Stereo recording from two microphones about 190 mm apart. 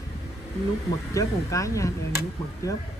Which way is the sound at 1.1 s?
15° left (ahead or behind).